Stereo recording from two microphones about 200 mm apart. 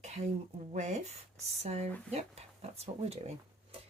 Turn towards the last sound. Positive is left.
turn(degrees=-30)  # may be behind; listen again after turning